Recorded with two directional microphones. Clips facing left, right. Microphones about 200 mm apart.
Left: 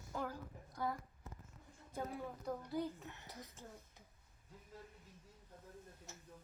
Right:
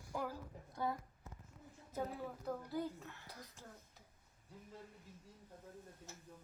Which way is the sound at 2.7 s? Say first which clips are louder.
Left 1 dB; 20° left (ahead or behind).